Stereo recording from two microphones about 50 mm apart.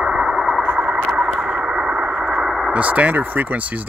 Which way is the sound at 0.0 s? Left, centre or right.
Centre.